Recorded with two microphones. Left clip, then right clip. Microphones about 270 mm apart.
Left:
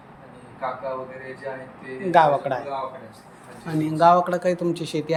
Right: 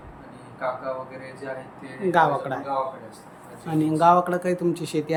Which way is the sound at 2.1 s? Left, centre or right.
Centre.